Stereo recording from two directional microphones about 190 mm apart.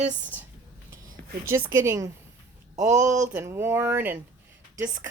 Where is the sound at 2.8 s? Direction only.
40° right (ahead or behind).